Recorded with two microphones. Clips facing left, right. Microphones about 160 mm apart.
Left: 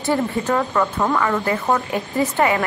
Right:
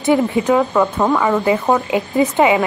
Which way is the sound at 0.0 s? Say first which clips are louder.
Right 6 dB; 15° right (ahead or behind).